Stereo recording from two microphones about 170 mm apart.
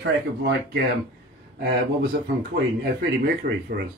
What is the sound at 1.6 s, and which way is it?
Speech, 75° right (ahead or behind).